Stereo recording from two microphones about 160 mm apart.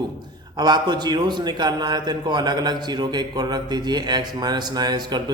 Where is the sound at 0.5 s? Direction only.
25° right (ahead or behind).